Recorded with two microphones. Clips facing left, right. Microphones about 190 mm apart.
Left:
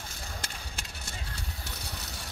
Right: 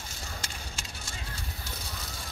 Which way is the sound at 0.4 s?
60° left (ahead or behind).